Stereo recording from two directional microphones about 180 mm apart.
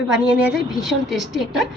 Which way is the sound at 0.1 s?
Centre (ahead or behind).